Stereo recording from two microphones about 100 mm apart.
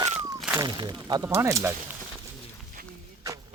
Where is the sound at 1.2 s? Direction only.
30° right (ahead or behind).